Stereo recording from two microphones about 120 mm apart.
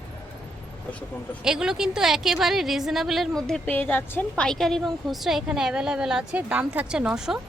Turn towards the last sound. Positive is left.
turn(degrees=-5)  # may be behind; listen again after turning